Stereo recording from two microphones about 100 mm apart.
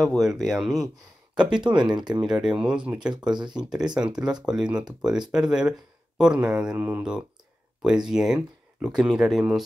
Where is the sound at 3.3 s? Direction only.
50° right (ahead or behind).